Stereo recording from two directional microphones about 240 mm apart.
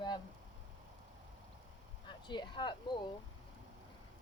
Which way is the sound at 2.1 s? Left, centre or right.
Centre.